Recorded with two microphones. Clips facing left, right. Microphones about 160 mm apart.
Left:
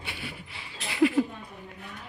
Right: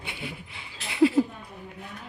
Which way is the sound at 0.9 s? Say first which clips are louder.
Right 2 dB; 25° right (ahead or behind).